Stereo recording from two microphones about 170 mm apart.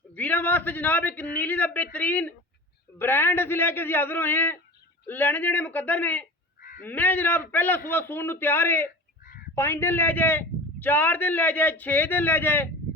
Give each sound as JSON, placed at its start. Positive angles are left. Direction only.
{"t": 0.1, "sound": "a man's voice", "side_deg": 10}
{"t": 6.6, "sound": "honk", "side_deg": 55}
{"t": 6.8, "sound": "a man's voice", "side_deg": 10}
{"t": 9.2, "sound": "a sound", "side_deg": 60}
{"t": 9.6, "sound": "a man's voice", "side_deg": 15}